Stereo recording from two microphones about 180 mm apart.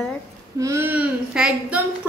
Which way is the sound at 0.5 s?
15° right (ahead or behind).